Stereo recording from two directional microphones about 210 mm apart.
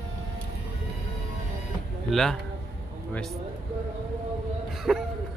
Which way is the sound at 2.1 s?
Centre (ahead or behind).